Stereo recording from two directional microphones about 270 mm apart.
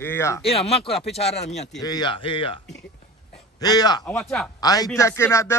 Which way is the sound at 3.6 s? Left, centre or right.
Centre.